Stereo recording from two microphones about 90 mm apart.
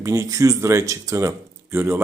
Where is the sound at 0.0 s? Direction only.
35° right (ahead or behind).